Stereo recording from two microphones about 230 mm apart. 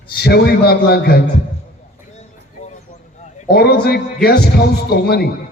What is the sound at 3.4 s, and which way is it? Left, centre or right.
A man's voice, left.